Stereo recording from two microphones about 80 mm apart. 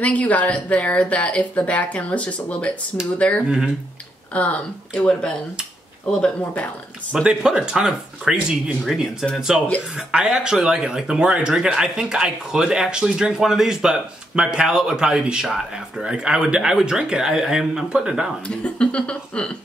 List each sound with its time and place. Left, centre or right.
0.0 s speech: centre
3.4 s speech: centre
4.3 s speech: centre
7.2 s speech: centre
18.5 s speech: centre